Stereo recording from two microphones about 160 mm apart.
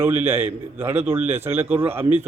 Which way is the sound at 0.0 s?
15° right (ahead or behind).